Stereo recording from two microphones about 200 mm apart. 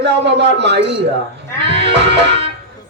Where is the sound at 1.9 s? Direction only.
60° right (ahead or behind).